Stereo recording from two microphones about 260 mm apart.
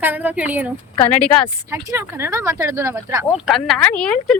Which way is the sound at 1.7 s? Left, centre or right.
Centre.